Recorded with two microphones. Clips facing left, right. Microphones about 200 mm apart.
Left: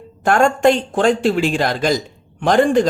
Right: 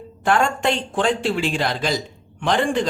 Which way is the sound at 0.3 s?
45° left (ahead or behind).